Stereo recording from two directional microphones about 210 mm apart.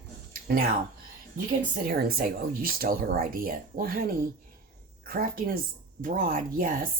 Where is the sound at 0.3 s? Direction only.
45° right (ahead or behind).